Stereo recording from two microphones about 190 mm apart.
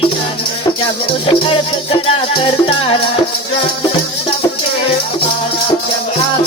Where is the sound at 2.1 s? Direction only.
30° left (ahead or behind).